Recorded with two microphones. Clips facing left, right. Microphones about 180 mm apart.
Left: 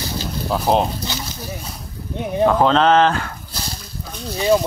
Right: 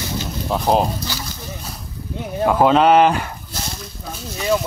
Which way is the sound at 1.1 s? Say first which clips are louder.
Left 1 dB; 20° left (ahead or behind).